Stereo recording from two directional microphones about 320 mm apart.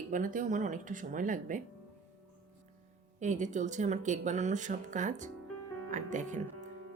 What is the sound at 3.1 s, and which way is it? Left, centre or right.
Speech, right.